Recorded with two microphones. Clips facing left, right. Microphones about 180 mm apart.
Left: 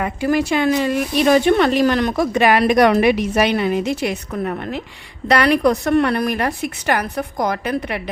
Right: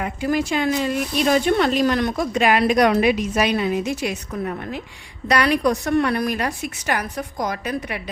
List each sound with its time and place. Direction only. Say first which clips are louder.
0.0 s a woman's voice: left 4 dB; 70° left (ahead or behind)